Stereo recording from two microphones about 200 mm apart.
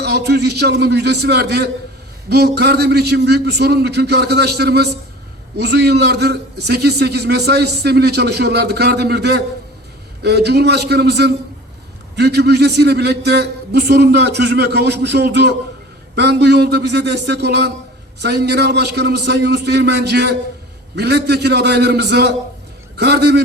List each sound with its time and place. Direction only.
0.0 s a man's voice: 55° right (ahead or behind)